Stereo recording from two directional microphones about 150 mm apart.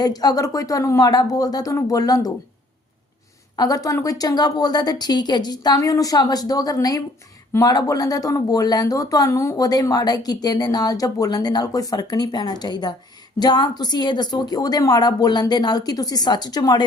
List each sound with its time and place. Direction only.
0.0 s speech: 25° left (ahead or behind)
3.5 s speech: 25° left (ahead or behind)